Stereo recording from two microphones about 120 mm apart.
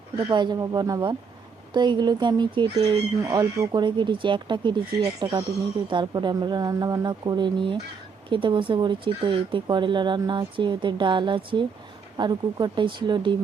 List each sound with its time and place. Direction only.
0.3 s speech: 40° right (ahead or behind)
3.2 s speech: 25° right (ahead or behind)
3.8 s speech: 40° right (ahead or behind)